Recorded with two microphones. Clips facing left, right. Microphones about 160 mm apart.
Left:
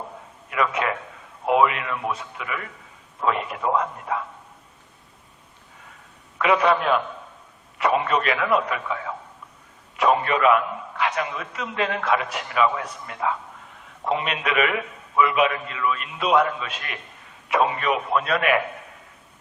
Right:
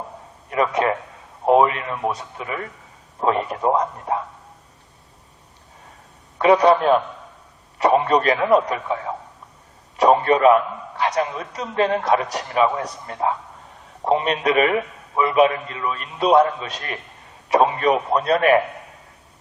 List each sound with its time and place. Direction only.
0.5 s a man's voice: 35° right (ahead or behind)
6.4 s a man's voice: 35° right (ahead or behind)